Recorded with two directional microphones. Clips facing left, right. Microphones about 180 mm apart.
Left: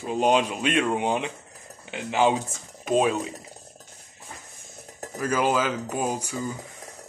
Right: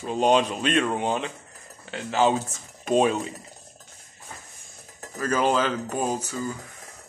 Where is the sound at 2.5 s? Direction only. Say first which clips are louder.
Right 1 dB; 5° left (ahead or behind).